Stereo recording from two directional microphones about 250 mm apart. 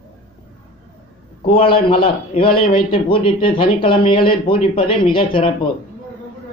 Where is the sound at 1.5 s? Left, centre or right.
Left.